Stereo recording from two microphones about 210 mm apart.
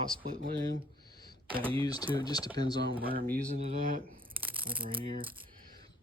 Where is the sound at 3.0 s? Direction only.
45° right (ahead or behind); by 5.1 s 25° right (ahead or behind).